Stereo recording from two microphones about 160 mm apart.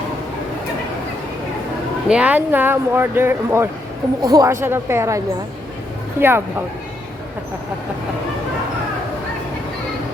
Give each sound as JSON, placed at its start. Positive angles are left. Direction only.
{"t": 2.0, "sound": "speech", "side_deg": -10}